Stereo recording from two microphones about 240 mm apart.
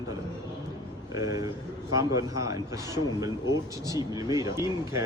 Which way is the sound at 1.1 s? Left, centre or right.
Centre.